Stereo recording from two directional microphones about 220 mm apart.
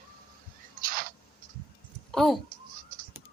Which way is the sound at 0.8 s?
40° right (ahead or behind).